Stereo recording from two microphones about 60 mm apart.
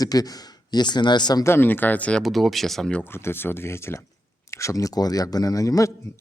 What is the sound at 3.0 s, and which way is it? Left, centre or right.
Speech, left.